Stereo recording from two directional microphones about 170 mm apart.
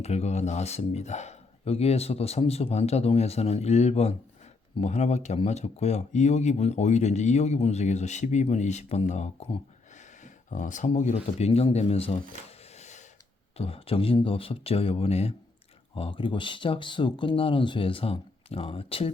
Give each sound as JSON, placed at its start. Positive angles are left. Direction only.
{"t": 0.0, "sound": "speech", "side_deg": 40}
{"t": 12.5, "sound": "a sound", "side_deg": 40}
{"t": 13.6, "sound": "speech", "side_deg": 35}